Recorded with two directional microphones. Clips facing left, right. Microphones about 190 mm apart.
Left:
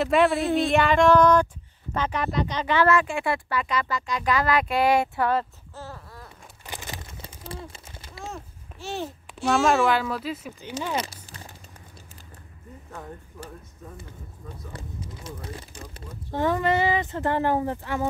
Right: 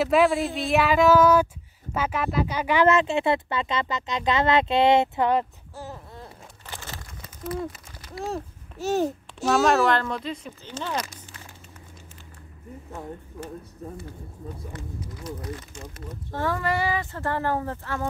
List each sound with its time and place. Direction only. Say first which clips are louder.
0.0 s speech: right 1 dB; centre (ahead or behind); by 6.3 s 20° right (ahead or behind)
6.6 s a sound: left 2 dB; 15° left (ahead or behind)
7.2 s a sound: right 8 dB; 30° left (ahead or behind)
8.2 s speech: right 7 dB; 40° right (ahead or behind)
9.4 s speech: right 1 dB; centre (ahead or behind)
15.2 s speech: right 6 dB; 30° left (ahead or behind)
16.3 s speech: left 3 dB; 20° left (ahead or behind)